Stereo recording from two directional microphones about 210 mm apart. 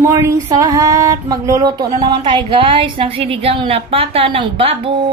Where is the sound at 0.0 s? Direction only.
15° right (ahead or behind).